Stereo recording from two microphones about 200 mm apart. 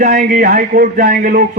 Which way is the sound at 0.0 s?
40° right (ahead or behind).